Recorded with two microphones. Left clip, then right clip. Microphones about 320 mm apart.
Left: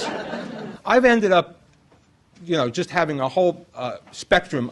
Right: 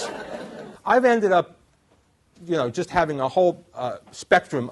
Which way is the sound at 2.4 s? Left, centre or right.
Centre.